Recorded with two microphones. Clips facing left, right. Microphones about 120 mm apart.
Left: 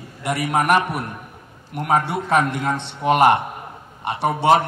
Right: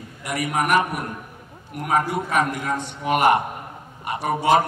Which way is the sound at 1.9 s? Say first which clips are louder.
Left 3 dB; 25° left (ahead or behind).